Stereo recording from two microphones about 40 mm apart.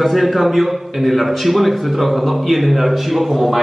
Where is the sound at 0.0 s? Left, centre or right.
Centre.